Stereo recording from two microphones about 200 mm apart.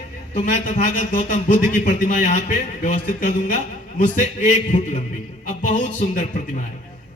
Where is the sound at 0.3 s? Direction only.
40° left (ahead or behind).